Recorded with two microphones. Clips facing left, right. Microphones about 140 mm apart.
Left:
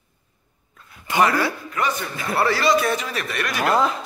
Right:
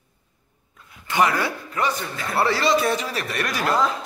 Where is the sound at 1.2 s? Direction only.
20° right (ahead or behind); by 3.6 s 35° right (ahead or behind).